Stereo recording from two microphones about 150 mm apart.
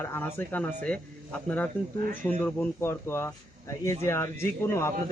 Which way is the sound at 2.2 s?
10° left (ahead or behind).